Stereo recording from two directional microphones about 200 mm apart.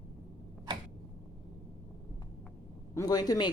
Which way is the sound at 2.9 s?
20° left (ahead or behind).